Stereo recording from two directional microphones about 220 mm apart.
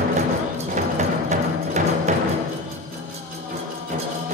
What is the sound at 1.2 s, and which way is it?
Music, 30° right (ahead or behind).